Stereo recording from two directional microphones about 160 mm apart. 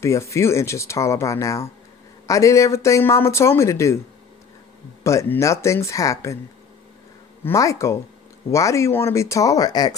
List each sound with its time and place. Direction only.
0.0 s speech: 20° left (ahead or behind)
5.0 s speech: 20° left (ahead or behind)
7.4 s speech: 20° left (ahead or behind)